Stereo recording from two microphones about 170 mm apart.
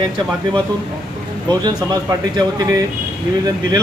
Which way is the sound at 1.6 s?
25° right (ahead or behind).